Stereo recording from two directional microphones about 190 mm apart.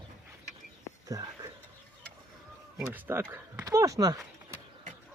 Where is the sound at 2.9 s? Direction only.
10° right (ahead or behind).